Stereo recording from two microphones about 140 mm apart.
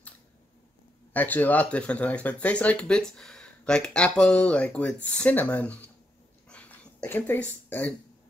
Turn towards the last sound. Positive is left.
turn(degrees=10)  # may be behind; listen again after turning